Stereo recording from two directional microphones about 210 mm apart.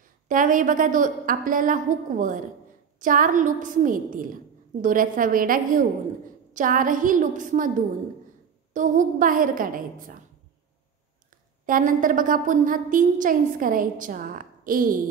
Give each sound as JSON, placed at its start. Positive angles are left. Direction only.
{"t": 0.3, "sound": "a woman's voice", "side_deg": -40}
{"t": 8.7, "sound": "a woman's voice", "side_deg": -40}
{"t": 11.6, "sound": "a woman's voice", "side_deg": -40}